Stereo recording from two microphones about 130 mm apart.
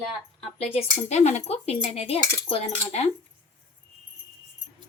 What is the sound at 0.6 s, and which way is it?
A woman's voice, 55° left (ahead or behind).